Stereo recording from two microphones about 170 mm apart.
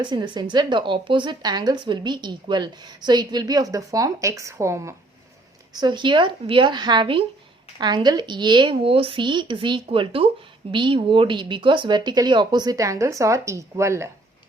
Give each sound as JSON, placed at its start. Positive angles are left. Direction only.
{"t": 0.0, "sound": "speech", "side_deg": -25}